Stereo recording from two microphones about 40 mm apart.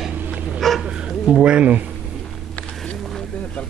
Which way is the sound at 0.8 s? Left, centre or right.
Centre.